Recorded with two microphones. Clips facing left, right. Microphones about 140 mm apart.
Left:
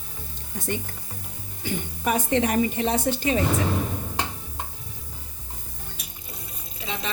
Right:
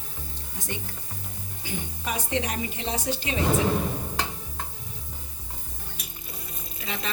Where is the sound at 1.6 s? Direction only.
55° left (ahead or behind).